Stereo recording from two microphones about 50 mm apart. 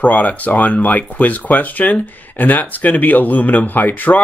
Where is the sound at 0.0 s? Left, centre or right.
Left.